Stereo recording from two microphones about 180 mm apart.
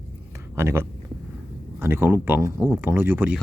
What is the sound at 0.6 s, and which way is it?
Speech, 15° right (ahead or behind).